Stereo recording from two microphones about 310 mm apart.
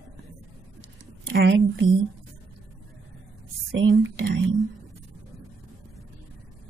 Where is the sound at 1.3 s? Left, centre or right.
Right.